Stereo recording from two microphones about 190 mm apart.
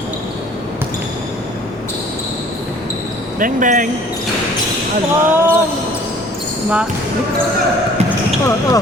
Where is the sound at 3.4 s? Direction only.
45° right (ahead or behind).